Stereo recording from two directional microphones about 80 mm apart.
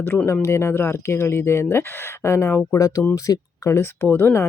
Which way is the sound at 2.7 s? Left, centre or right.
Left.